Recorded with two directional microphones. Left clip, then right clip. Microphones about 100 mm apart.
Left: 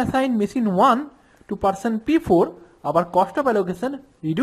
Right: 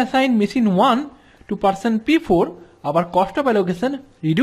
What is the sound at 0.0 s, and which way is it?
Speech, 10° left (ahead or behind).